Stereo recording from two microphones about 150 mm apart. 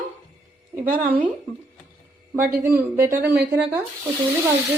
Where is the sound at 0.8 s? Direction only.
65° right (ahead or behind).